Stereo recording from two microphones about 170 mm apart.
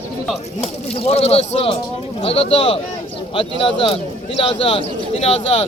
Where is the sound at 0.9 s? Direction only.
35° left (ahead or behind).